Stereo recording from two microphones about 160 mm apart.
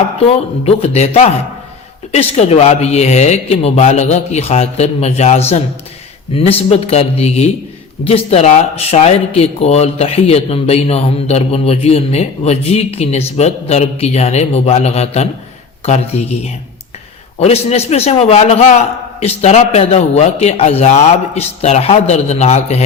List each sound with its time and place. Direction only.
0.6 s speech: 40° left (ahead or behind)